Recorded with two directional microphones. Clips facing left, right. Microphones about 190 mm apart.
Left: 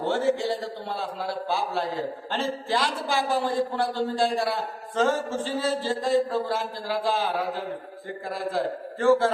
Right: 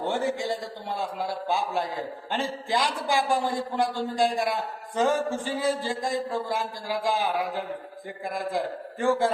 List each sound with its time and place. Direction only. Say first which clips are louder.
0.1 s a man's voice: left 4 dB; 15° right (ahead or behind)
8.3 s a man's voice: left 2 dB; 15° right (ahead or behind)